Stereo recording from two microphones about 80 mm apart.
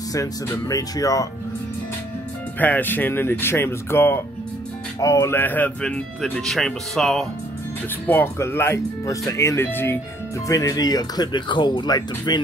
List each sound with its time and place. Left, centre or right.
0.7 s speech: left
2.6 s speech: left
5.0 s speech: left
5.3 s speech: left; by 7.2 s centre
8.1 s speech: left
10.5 s speech: left